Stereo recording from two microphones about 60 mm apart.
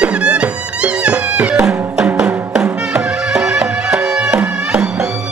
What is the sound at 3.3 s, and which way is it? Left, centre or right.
Music, centre.